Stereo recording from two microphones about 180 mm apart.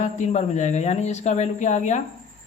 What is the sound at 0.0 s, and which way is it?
Speech, 40° left (ahead or behind).